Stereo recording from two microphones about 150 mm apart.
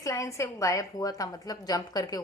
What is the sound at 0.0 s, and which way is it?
A woman's voice, 20° left (ahead or behind).